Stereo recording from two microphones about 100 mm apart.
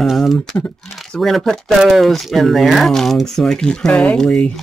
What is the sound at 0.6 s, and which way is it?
Speech, 15° left (ahead or behind).